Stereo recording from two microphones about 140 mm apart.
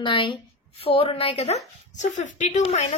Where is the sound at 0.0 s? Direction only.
35° left (ahead or behind).